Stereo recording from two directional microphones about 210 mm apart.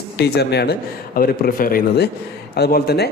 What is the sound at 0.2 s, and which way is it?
Speech, 50° left (ahead or behind).